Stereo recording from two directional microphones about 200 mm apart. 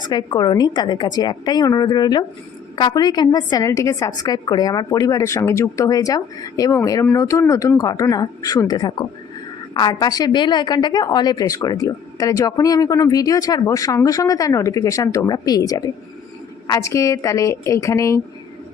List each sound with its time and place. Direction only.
0.1 s a woman's voice: 20° left (ahead or behind)